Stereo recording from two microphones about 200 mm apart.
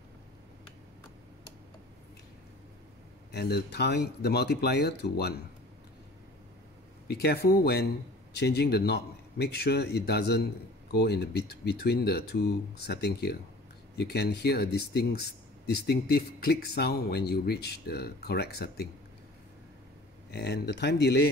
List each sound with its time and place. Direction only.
3.3 s speech: 55° left (ahead or behind)
7.1 s speech: 50° left (ahead or behind)
20.2 s speech: 55° left (ahead or behind)